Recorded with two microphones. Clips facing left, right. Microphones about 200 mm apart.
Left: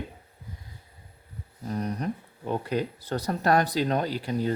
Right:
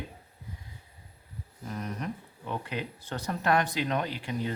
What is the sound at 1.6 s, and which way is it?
Speech, 35° left (ahead or behind).